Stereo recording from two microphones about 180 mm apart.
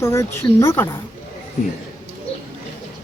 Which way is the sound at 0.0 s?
15° left (ahead or behind).